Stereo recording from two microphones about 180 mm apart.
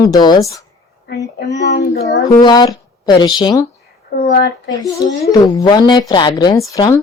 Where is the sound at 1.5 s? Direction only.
70° left (ahead or behind).